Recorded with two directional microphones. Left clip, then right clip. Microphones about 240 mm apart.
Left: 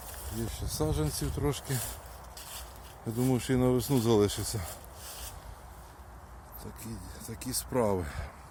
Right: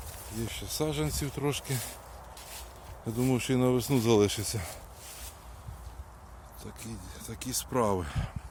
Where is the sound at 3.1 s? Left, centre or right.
Centre.